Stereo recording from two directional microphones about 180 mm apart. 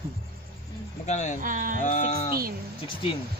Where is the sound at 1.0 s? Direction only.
40° left (ahead or behind).